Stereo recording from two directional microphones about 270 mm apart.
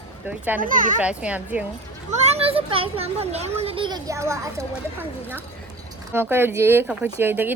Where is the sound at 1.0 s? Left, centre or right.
Centre.